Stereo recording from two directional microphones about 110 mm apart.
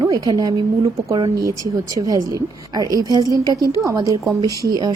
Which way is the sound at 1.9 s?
30° right (ahead or behind).